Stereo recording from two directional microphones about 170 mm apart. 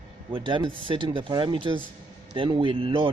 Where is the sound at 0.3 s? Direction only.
30° right (ahead or behind).